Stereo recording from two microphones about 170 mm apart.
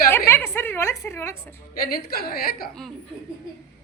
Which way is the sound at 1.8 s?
60° left (ahead or behind).